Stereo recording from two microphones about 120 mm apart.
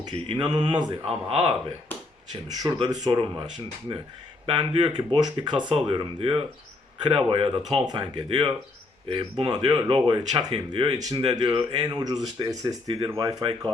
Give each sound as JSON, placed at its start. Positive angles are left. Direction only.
{"t": 0.3, "sound": "speech", "side_deg": -40}
{"t": 1.0, "sound": "speech", "side_deg": -50}
{"t": 2.3, "sound": "speech", "side_deg": -35}
{"t": 9.6, "sound": "speech", "side_deg": -35}